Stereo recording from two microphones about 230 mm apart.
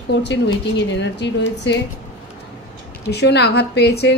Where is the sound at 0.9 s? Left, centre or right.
Left.